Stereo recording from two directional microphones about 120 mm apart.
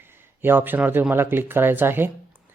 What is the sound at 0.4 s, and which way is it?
Speech, 15° right (ahead or behind).